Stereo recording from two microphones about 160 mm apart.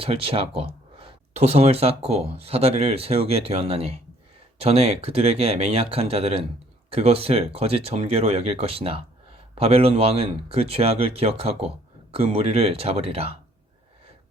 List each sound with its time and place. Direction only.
0.0 s speech: 35° right (ahead or behind)